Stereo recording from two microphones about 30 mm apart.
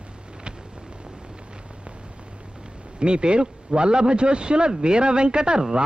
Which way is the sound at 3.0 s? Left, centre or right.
Right.